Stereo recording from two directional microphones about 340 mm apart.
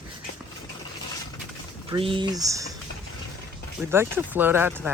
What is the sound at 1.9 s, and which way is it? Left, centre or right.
Speech, centre.